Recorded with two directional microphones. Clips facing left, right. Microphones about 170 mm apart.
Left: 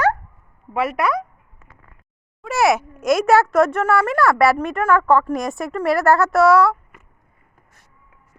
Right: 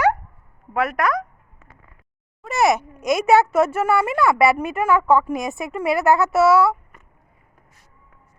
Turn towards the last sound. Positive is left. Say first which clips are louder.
# left 1 dB
turn(degrees=0)  # may be behind; listen again after turning